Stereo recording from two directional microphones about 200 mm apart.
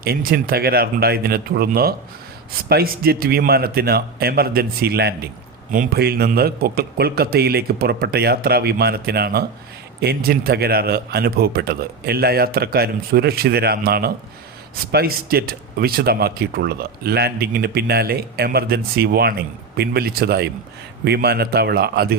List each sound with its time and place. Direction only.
0.0 s speech: 50° right (ahead or behind)